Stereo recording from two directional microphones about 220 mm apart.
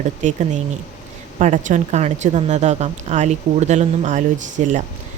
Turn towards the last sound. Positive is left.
turn(degrees=-35)  # may be behind; listen again after turning